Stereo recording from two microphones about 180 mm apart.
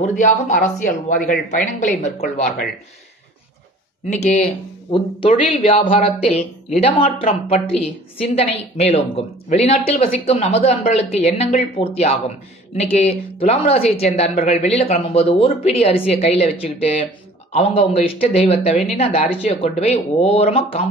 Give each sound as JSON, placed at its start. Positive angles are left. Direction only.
{"t": 0.0, "sound": "speech", "side_deg": 45}
{"t": 4.1, "sound": "speech", "side_deg": 40}